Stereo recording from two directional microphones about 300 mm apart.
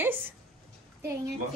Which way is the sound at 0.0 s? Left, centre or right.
Centre.